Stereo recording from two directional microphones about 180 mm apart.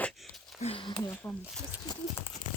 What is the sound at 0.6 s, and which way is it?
Speech, 30° left (ahead or behind).